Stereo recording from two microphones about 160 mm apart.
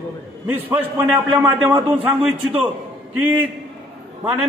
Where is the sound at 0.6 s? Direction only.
10° right (ahead or behind).